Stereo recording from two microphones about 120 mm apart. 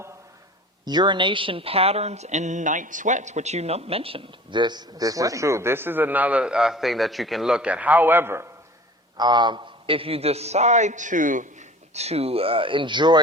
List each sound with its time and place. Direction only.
0.9 s speech: 40° right (ahead or behind); by 8.4 s 20° right (ahead or behind)
9.1 s a man's voice: 35° right (ahead or behind)